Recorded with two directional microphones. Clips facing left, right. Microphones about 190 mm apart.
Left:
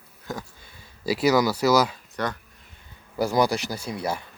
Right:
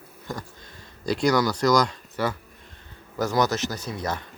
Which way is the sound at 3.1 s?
10° left (ahead or behind).